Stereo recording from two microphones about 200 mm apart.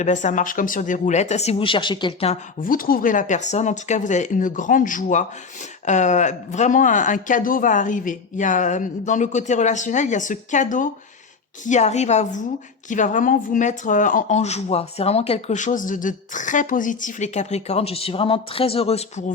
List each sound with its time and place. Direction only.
0.0 s speech: 35° left (ahead or behind)
2.6 s speech: 45° left (ahead or behind)